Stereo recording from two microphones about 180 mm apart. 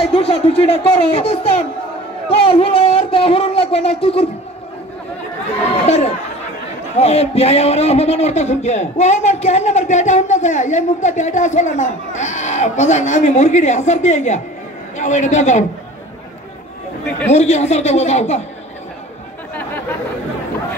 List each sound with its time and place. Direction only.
0.0 s a man's voice: 30° left (ahead or behind)
5.9 s a man's voice: 35° left (ahead or behind)
17.3 s a man's voice: 40° left (ahead or behind)